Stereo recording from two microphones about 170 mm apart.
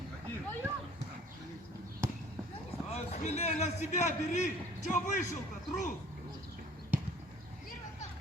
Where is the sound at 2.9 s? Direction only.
40° left (ahead or behind).